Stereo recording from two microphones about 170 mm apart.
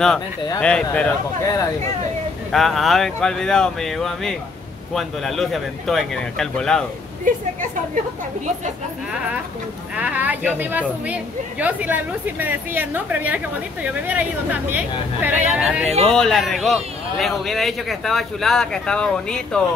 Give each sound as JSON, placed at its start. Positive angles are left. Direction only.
{"t": 0.6, "sound": "speech", "side_deg": 5}
{"t": 1.4, "sound": "speech", "side_deg": 20}
{"t": 2.5, "sound": "a man's voice", "side_deg": 0}
{"t": 9.9, "sound": "a man's voice", "side_deg": -10}